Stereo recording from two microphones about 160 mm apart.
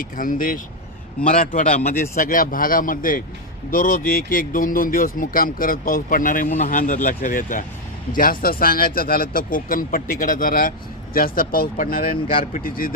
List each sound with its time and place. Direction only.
0.0 s a man's voice: 60° left (ahead or behind)
1.9 s a man's voice: 60° left (ahead or behind)